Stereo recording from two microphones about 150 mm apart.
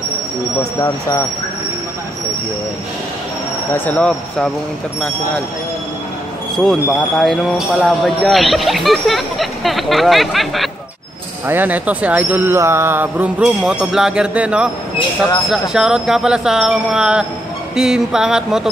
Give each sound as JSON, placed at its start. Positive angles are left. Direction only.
{"t": 0.7, "sound": "speech", "side_deg": 20}
{"t": 3.7, "sound": "speech", "side_deg": 10}
{"t": 6.5, "sound": "speech", "side_deg": 5}
{"t": 11.4, "sound": "speech", "side_deg": -10}